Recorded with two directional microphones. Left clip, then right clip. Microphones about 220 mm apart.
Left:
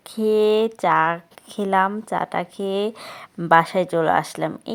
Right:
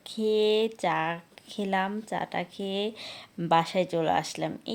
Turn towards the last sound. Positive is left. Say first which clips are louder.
# left 7 dB
turn(degrees=20)  # may be behind; listen again after turning